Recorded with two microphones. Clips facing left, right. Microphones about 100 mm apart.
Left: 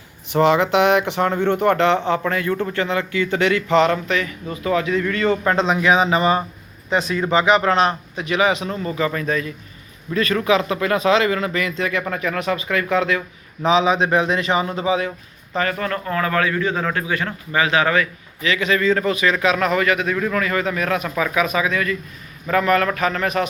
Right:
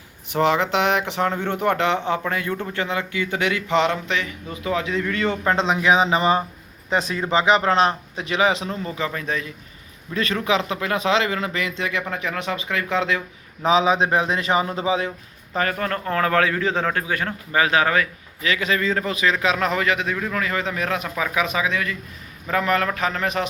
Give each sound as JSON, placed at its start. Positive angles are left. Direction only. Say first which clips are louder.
{"t": 0.3, "sound": "speech", "louder": "left 4 dB", "side_deg": 0}
{"t": 9.0, "sound": "speech", "louder": "left 6 dB", "side_deg": -20}
{"t": 13.7, "sound": "a man's voice", "louder": "left 1 dB", "side_deg": -35}
{"t": 15.5, "sound": "speech", "louder": "left 1 dB", "side_deg": -45}
{"t": 16.0, "sound": "a man's voice", "louder": "right 1 dB", "side_deg": -65}
{"t": 16.8, "sound": "a man's voice", "louder": "left 1 dB", "side_deg": -45}
{"t": 20.1, "sound": "speech", "louder": "left 5 dB", "side_deg": -10}
{"t": 20.4, "sound": "speech", "louder": "left 3 dB", "side_deg": -25}